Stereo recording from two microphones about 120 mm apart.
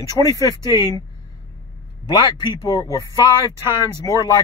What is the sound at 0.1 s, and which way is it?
Speech, 30° left (ahead or behind).